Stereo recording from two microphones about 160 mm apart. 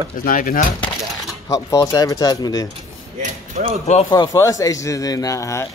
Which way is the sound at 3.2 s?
50° right (ahead or behind).